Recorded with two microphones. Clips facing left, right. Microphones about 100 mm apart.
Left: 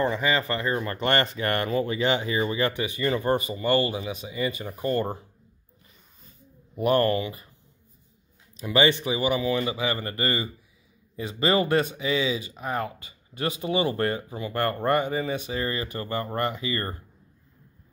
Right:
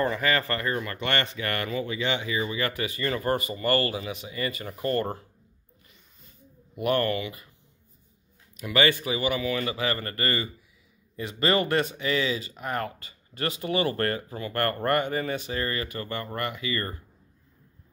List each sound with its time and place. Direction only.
0.0 s speech: 15° left (ahead or behind)
2.8 s speech: 20° left (ahead or behind)
6.8 s speech: 35° left (ahead or behind)
8.5 s speech: 25° left (ahead or behind)